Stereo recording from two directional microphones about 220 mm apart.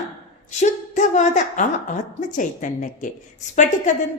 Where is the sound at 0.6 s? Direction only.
35° left (ahead or behind).